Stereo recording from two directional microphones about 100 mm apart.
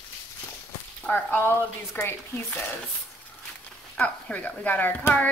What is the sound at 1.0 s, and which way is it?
A woman's voice, 20° left (ahead or behind).